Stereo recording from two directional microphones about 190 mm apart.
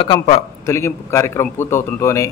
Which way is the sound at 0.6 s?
15° left (ahead or behind).